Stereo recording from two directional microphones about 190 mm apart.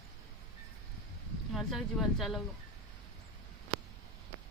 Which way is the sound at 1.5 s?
Centre (ahead or behind).